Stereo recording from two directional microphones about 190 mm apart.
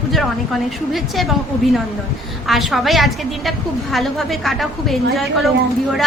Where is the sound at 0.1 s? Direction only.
Centre (ahead or behind).